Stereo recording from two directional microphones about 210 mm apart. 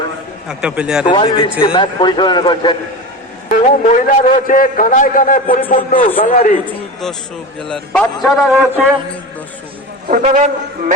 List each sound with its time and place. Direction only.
0.4 s a man's voice: 5° right (ahead or behind)
1.0 s a man's voice: 25° left (ahead or behind)
3.5 s a man's voice: 40° left (ahead or behind)
6.7 s a man's voice: centre (ahead or behind)
10.1 s a man's voice: 35° right (ahead or behind)